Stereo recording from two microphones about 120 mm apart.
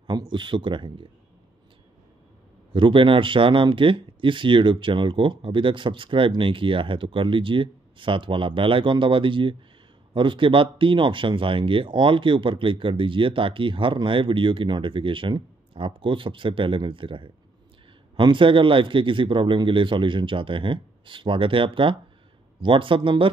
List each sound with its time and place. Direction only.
0.0 s speech: 40° right (ahead or behind)
2.7 s speech: 45° right (ahead or behind)